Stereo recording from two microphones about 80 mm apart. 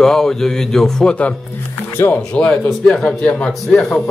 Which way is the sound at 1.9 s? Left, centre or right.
Left.